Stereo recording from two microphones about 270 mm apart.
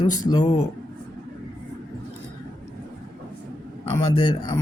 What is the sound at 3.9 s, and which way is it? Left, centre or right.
Speech, centre.